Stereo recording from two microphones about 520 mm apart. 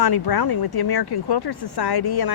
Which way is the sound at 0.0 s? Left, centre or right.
Left.